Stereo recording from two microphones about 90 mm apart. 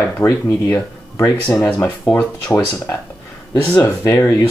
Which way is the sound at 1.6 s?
25° left (ahead or behind).